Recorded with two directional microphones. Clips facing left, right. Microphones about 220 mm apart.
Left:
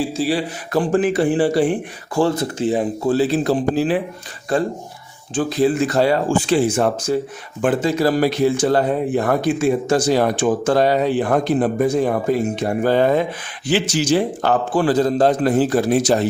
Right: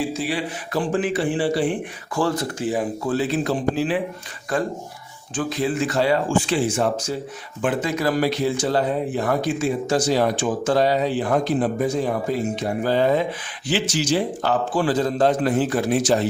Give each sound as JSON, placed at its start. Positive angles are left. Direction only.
{"t": 0.1, "sound": "speech", "side_deg": 35}
{"t": 2.1, "sound": "speech", "side_deg": 25}
{"t": 8.6, "sound": "speech", "side_deg": 55}
{"t": 14.9, "sound": "speech", "side_deg": 40}